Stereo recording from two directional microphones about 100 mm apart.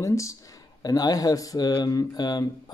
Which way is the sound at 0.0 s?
30° left (ahead or behind).